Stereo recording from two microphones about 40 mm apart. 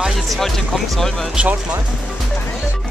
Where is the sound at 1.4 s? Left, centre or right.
Right.